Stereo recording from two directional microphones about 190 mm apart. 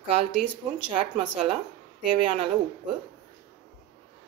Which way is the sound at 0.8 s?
25° right (ahead or behind).